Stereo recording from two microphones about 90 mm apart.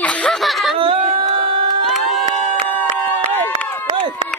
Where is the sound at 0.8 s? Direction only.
90° right.